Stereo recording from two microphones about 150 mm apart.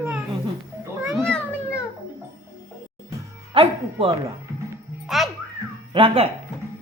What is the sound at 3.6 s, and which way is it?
Music, 40° right (ahead or behind).